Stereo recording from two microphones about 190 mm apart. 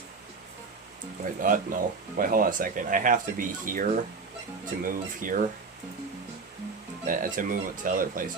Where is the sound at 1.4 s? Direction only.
45° right (ahead or behind).